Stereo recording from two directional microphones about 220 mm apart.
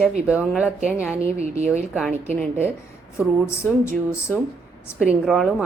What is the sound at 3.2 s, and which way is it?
Speech, 10° left (ahead or behind).